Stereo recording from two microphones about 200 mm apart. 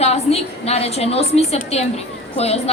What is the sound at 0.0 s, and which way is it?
A woman's voice, 30° left (ahead or behind).